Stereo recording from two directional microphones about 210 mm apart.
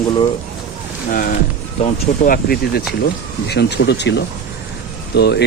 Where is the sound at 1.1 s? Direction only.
40° left (ahead or behind).